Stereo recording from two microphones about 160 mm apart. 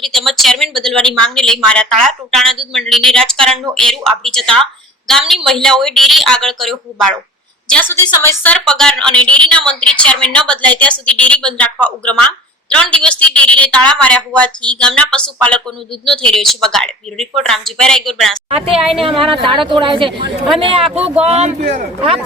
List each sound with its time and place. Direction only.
0.0 s a woman's voice: centre (ahead or behind)
8.6 s a woman's voice: 5° left (ahead or behind)
18.4 s a woman's voice: 40° right (ahead or behind)
18.7 s a woman's voice: centre (ahead or behind)
19.4 s speech: 30° right (ahead or behind)